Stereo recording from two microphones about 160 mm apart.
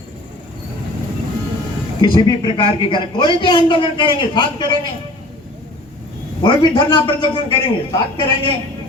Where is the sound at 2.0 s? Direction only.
25° left (ahead or behind).